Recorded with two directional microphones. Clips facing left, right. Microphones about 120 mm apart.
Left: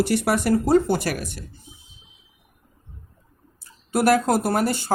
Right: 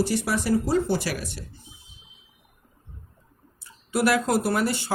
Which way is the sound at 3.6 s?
45° left (ahead or behind).